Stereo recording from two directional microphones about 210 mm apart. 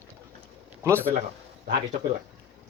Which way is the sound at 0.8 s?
10° right (ahead or behind).